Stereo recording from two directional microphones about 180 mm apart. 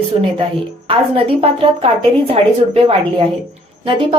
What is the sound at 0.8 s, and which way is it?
A woman's voice, 30° right (ahead or behind).